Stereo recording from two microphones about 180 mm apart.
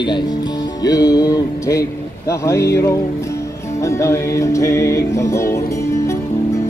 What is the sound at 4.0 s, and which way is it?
Music, 15° left (ahead or behind).